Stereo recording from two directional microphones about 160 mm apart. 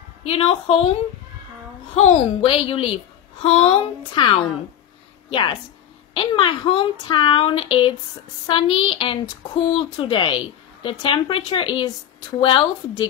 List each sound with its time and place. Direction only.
0.3 s a woman's voice: 35° left (ahead or behind)
2.0 s a woman's voice: 40° left (ahead or behind)